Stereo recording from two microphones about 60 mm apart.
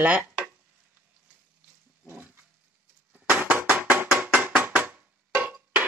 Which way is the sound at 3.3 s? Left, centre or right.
Right.